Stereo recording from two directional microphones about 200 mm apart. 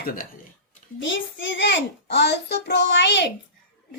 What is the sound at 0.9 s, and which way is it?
A child's voice, 70° left (ahead or behind).